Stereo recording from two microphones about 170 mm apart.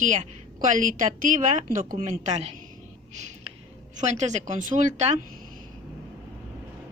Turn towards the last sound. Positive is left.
turn(degrees=-45)  # may be behind; listen again after turning